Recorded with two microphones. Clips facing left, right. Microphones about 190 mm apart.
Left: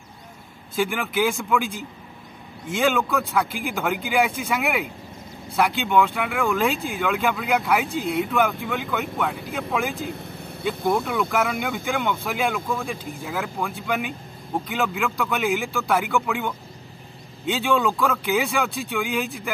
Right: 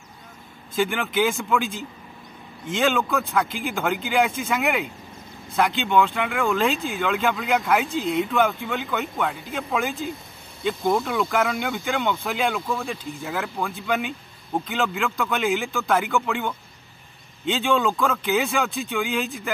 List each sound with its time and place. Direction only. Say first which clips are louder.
0.7 s a man's voice: right 1 dB; 5° left (ahead or behind)
2.7 s a man's voice: even; 5° left (ahead or behind)
10.0 s speech: even; 65° left (ahead or behind)
11.1 s a man's voice: even; 10° left (ahead or behind)